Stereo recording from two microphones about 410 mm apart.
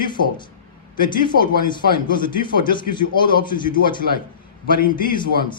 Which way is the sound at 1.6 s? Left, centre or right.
Centre.